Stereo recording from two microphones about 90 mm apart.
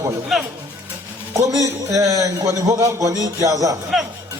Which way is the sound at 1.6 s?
40° right (ahead or behind).